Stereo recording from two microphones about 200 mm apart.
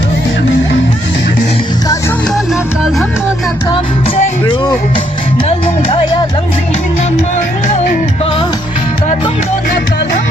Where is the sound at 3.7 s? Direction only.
25° left (ahead or behind).